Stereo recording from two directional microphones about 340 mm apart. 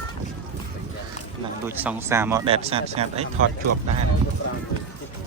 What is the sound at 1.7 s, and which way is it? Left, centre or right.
Speech, centre.